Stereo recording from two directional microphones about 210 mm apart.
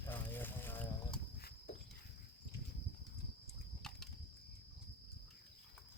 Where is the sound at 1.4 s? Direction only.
45° left (ahead or behind).